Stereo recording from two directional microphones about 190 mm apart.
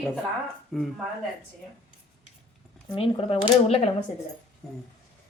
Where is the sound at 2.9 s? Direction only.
30° left (ahead or behind).